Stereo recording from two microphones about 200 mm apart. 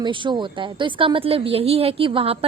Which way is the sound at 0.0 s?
25° right (ahead or behind).